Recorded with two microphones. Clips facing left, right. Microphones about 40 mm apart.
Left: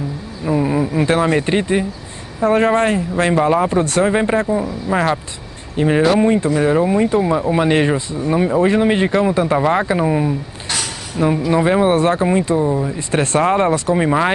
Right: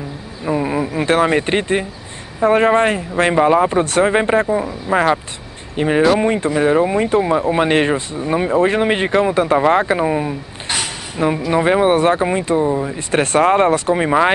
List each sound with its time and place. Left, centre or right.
0.5 s speech: centre
5.8 s speech: right
13.1 s speech: right